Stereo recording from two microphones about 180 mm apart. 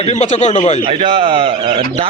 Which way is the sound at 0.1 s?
40° left (ahead or behind).